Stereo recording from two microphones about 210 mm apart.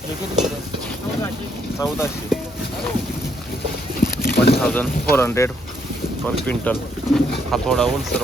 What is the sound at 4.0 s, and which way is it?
Boat, 45° left (ahead or behind).